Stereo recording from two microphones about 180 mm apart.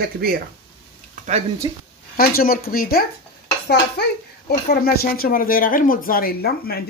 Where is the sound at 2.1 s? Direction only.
55° left (ahead or behind).